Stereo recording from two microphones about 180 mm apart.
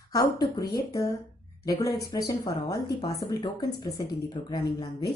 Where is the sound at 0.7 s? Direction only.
20° left (ahead or behind).